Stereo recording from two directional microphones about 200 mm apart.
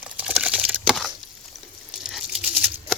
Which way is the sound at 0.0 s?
5° right (ahead or behind).